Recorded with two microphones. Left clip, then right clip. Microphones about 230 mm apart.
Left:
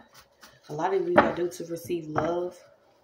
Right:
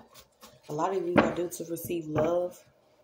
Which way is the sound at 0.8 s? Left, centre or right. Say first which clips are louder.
Left 4 dB; right.